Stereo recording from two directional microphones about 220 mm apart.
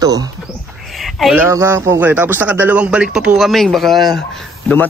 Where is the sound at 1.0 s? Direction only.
5° right (ahead or behind).